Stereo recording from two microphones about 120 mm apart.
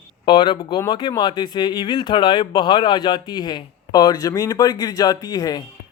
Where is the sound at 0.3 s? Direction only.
40° left (ahead or behind).